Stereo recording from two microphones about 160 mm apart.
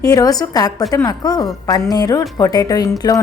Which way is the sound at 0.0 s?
20° left (ahead or behind).